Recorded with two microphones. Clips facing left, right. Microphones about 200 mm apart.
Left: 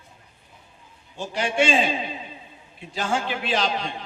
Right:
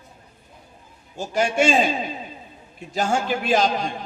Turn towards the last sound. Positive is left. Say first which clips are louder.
# right 5 dB
turn(degrees=-45)  # may be behind; listen again after turning